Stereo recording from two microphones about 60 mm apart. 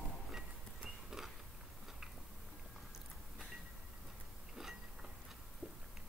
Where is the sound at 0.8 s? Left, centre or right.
Centre.